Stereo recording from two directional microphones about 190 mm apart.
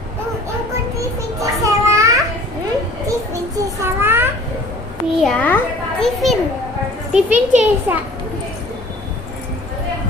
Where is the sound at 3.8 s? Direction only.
10° right (ahead or behind).